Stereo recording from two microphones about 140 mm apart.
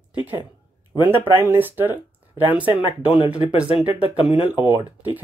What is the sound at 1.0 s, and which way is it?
Speech, 15° right (ahead or behind).